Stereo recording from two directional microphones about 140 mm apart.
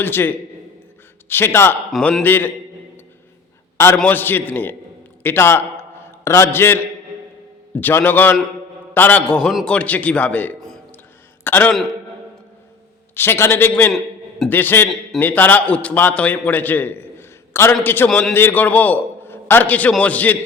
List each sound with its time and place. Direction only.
0.0 s a man's voice: 15° left (ahead or behind)
1.9 s a man's voice: 5° left (ahead or behind)
3.9 s a man's voice: 10° left (ahead or behind)
13.1 s a man's voice: 15° left (ahead or behind)
13.9 s a sound: centre (ahead or behind)
14.5 s a man's voice: 15° left (ahead or behind)